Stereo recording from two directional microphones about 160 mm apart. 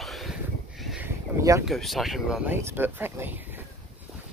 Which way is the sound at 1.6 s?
Centre (ahead or behind).